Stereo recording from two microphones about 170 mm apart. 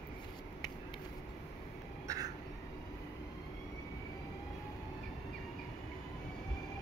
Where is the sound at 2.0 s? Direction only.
20° right (ahead or behind).